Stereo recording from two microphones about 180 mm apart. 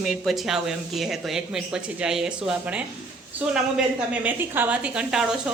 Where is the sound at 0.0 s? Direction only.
Centre (ahead or behind).